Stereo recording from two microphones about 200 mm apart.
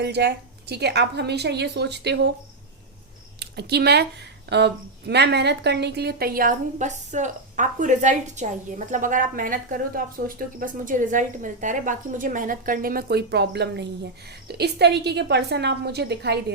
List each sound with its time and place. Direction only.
0.0 s a woman's voice: 55° right (ahead or behind)
3.4 s a woman's voice: 55° right (ahead or behind)